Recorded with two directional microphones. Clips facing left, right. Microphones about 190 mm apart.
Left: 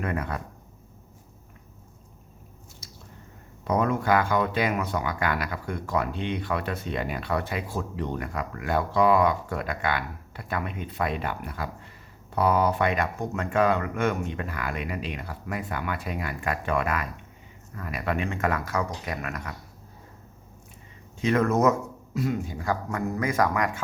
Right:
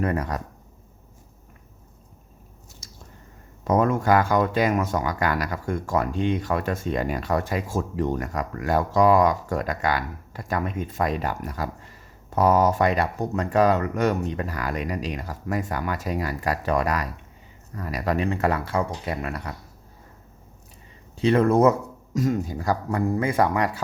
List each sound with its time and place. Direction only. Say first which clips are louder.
0.0 s speech: right 4 dB; 40° right (ahead or behind)
2.8 s squish: left 2 dB; 45° right (ahead or behind)
3.6 s speech: right 4 dB; 45° right (ahead or behind)
21.2 s speech: right 4 dB; 30° right (ahead or behind)
22.1 s speech: right 4 dB; 45° right (ahead or behind)